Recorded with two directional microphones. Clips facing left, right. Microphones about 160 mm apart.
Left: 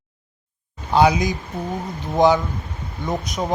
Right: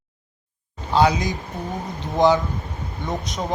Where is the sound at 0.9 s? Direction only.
15° left (ahead or behind).